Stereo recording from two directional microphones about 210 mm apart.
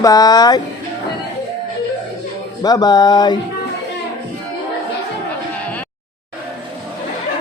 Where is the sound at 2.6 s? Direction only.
20° left (ahead or behind).